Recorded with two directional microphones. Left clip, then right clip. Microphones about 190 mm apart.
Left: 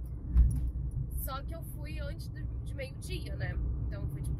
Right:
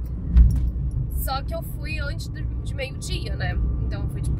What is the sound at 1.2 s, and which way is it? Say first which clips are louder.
Speech: right 14 dB; 20° right (ahead or behind).